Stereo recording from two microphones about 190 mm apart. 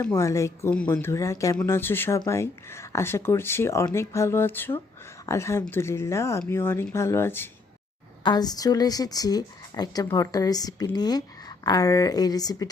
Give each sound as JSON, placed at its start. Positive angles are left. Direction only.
{"t": 0.0, "sound": "speech", "side_deg": 15}
{"t": 8.2, "sound": "a woman's voice", "side_deg": 20}